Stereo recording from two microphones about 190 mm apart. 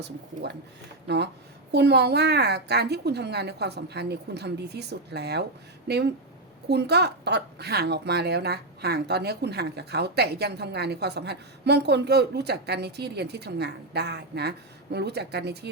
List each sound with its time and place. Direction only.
1.0 s a woman's voice: 60° right (ahead or behind)